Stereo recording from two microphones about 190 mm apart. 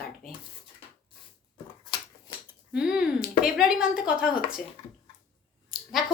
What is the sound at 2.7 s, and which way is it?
A woman's voice, 5° right (ahead or behind).